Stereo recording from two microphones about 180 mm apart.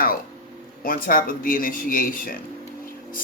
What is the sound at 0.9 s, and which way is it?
A man's voice, 50° left (ahead or behind).